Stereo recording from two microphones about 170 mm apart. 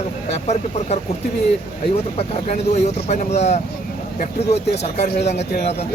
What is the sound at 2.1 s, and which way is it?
Speech, 40° left (ahead or behind).